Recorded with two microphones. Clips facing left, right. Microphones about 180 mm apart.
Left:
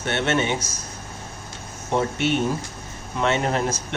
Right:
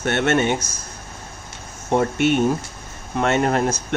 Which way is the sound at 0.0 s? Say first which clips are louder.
Right 4 dB; 50° right (ahead or behind).